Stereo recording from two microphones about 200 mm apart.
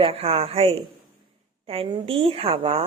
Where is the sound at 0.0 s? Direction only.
30° right (ahead or behind).